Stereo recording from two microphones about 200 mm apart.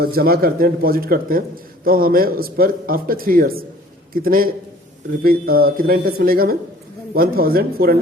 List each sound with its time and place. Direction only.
0.0 s a man's voice: 50° right (ahead or behind)